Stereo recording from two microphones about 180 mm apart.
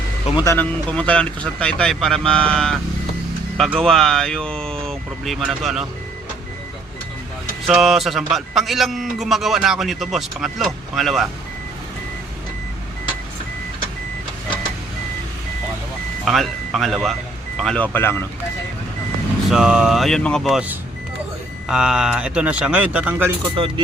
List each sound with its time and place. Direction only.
0.4 s a man's voice: 10° left (ahead or behind)
7.7 s a man's voice: centre (ahead or behind)
16.2 s speech: centre (ahead or behind)
19.5 s a man's voice: 5° right (ahead or behind)
23.6 s speech: 30° right (ahead or behind)